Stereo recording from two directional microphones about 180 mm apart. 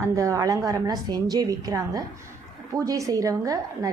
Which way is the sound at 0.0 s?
15° right (ahead or behind).